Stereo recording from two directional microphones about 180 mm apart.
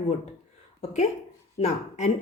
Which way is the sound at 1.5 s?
40° left (ahead or behind).